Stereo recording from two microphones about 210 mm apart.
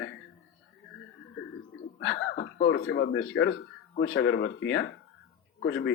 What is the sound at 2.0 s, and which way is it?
A man's voice, 60° left (ahead or behind).